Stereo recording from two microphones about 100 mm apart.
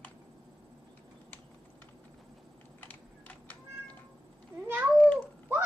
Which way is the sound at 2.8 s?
15° left (ahead or behind).